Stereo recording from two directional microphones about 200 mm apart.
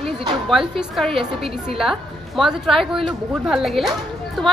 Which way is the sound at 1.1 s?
30° right (ahead or behind).